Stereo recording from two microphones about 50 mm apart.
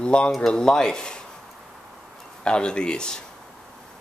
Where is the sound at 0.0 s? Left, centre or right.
Centre.